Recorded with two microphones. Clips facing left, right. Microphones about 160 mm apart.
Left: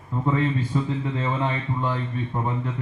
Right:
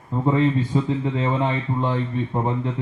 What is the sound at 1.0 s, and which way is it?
A man's voice, 20° right (ahead or behind).